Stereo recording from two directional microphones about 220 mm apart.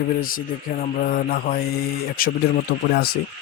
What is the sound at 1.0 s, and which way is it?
Mantra, 40° left (ahead or behind).